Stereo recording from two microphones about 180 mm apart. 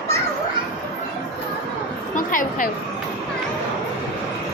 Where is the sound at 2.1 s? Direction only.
50° left (ahead or behind).